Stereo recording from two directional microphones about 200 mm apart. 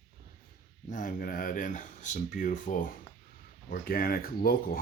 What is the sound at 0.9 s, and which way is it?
Speech, 40° left (ahead or behind).